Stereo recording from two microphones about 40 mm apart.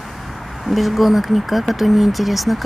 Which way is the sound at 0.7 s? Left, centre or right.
Centre.